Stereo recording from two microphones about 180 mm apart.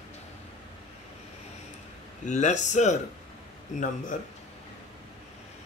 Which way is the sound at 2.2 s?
40° left (ahead or behind).